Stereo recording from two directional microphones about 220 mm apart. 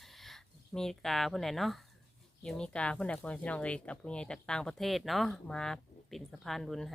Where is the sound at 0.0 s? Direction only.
Centre (ahead or behind).